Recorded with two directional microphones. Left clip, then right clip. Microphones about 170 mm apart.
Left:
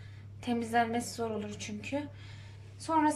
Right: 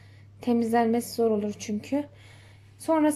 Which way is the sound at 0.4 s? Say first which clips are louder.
Right 6 dB; 30° right (ahead or behind).